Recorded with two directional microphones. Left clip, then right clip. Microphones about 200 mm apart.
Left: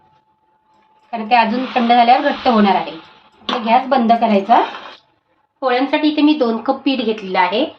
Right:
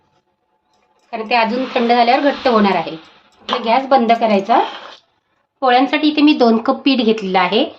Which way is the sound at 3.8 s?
55° right (ahead or behind).